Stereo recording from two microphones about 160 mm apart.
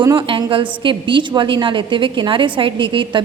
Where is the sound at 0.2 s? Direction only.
35° right (ahead or behind).